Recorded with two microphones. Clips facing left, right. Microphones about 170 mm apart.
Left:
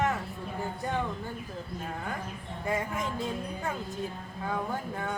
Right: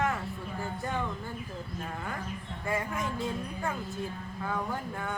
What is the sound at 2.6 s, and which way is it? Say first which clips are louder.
Speech: left 1 dB; 20° left (ahead or behind).